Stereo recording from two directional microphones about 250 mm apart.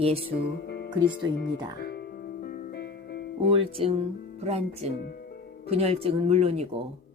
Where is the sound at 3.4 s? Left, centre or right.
Right.